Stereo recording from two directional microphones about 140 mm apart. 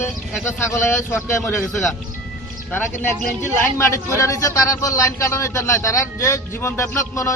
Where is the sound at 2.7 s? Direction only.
15° left (ahead or behind).